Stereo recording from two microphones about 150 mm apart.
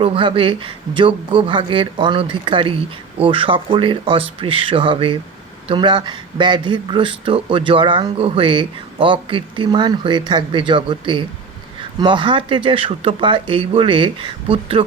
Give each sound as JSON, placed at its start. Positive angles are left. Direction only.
{"t": 0.0, "sound": "speech", "side_deg": -35}